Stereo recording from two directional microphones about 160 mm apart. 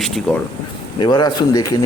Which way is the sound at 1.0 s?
25° left (ahead or behind).